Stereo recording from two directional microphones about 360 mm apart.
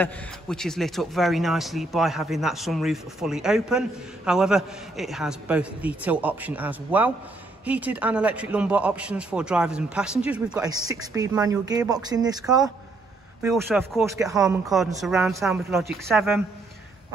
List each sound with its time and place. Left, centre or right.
0.0 s speech: centre